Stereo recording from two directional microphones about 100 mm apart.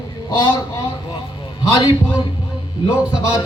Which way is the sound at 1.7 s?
55° left (ahead or behind).